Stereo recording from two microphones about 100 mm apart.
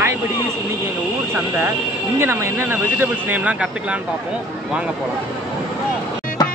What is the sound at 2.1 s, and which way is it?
Speech, 25° right (ahead or behind).